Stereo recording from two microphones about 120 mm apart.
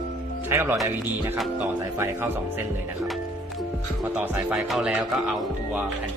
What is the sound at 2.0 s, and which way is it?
Speech, 20° right (ahead or behind).